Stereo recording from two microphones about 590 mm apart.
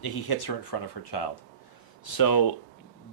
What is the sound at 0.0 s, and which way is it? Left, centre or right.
A man's voice, left.